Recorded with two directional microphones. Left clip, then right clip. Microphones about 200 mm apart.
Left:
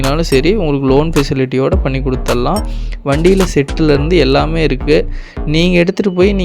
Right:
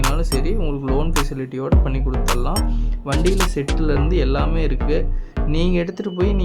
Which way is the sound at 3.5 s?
35° left (ahead or behind).